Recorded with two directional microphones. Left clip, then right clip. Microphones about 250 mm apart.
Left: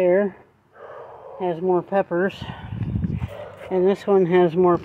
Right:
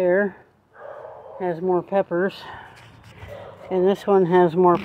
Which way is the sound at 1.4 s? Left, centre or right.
Centre.